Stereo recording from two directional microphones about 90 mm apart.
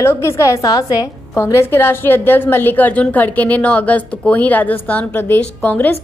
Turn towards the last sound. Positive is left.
turn(degrees=20)  # may be behind; listen again after turning